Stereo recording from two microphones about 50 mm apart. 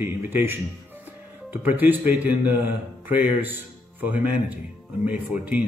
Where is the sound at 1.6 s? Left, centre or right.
Right.